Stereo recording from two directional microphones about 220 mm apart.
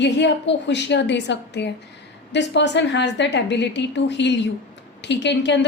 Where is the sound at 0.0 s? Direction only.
55° left (ahead or behind).